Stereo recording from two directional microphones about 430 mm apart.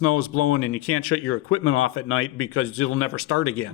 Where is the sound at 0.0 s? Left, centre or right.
Left.